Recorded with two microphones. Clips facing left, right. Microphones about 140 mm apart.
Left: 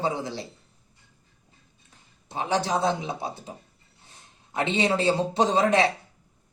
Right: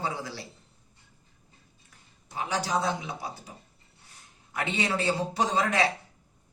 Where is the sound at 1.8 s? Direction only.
25° left (ahead or behind).